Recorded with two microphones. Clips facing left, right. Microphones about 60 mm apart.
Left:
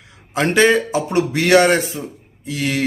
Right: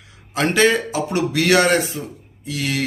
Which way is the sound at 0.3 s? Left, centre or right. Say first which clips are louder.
Left 2 dB; left.